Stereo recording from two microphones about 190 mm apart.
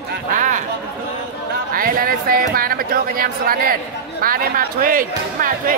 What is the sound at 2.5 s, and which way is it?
Speech, 50° right (ahead or behind).